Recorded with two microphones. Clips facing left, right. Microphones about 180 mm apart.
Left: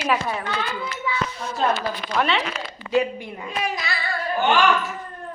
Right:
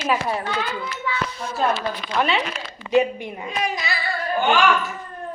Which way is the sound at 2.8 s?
20° right (ahead or behind).